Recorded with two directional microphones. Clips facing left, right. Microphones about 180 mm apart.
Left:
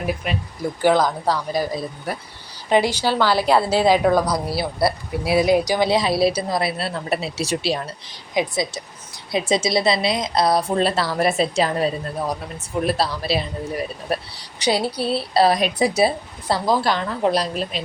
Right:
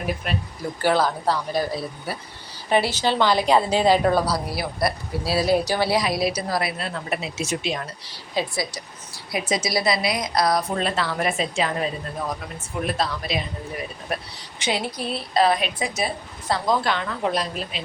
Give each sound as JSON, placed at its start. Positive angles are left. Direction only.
{"t": 0.8, "sound": "a woman's voice", "side_deg": 15}
{"t": 4.5, "sound": "speech", "side_deg": 30}
{"t": 8.0, "sound": "a woman's voice", "side_deg": 20}